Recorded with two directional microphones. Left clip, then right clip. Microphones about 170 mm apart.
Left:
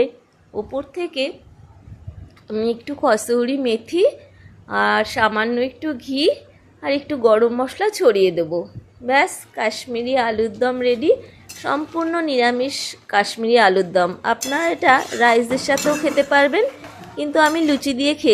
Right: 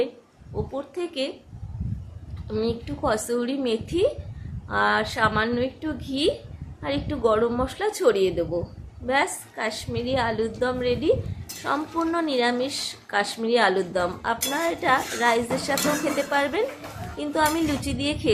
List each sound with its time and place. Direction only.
0.5 s a woman's voice: 20° left (ahead or behind)
2.5 s a woman's voice: 30° left (ahead or behind)